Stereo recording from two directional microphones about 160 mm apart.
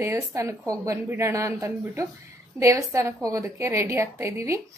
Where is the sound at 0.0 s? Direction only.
20° right (ahead or behind).